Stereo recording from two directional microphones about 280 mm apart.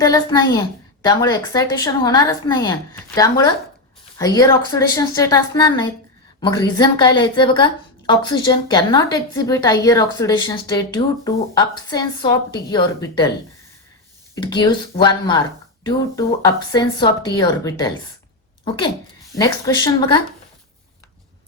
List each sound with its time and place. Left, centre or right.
0.0 s a woman's voice: centre
14.3 s a woman's voice: centre
19.4 s a woman's voice: centre